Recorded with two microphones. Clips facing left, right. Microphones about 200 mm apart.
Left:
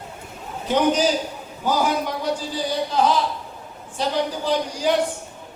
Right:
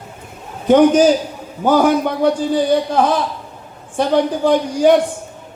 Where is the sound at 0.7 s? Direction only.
50° right (ahead or behind).